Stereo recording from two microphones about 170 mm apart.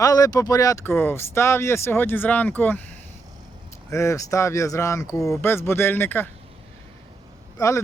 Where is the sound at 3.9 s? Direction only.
15° left (ahead or behind).